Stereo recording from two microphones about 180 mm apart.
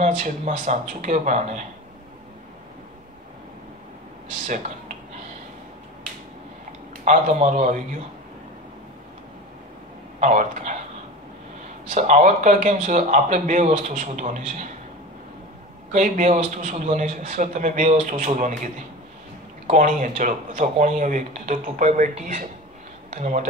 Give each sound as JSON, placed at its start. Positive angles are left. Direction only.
{"t": 0.0, "sound": "a man's voice", "side_deg": -45}
{"t": 4.5, "sound": "speech", "side_deg": -45}
{"t": 7.1, "sound": "a man's voice", "side_deg": -45}
{"t": 10.2, "sound": "a man's voice", "side_deg": -45}
{"t": 11.9, "sound": "a man's voice", "side_deg": -45}
{"t": 15.9, "sound": "a man's voice", "side_deg": -45}
{"t": 19.7, "sound": "a man's voice", "side_deg": -45}